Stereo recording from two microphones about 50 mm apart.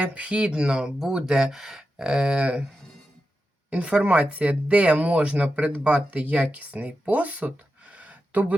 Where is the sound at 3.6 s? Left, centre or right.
Right.